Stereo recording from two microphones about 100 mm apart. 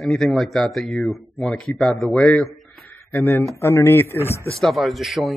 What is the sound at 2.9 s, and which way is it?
Speech, 25° left (ahead or behind).